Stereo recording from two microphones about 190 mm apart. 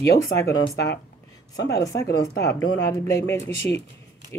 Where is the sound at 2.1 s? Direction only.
20° left (ahead or behind).